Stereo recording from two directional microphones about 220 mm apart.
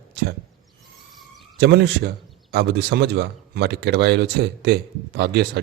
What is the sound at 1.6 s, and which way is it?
Speech, 50° right (ahead or behind).